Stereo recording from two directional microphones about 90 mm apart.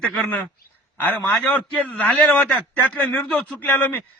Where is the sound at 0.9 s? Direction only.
20° left (ahead or behind).